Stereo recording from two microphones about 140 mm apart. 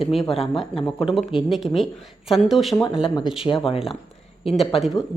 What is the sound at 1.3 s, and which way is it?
Speech, centre (ahead or behind).